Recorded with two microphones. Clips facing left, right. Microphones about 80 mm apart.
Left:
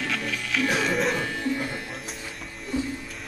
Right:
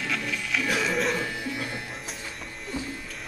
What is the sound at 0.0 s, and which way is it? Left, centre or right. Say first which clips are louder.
Music: left 1 dB; centre.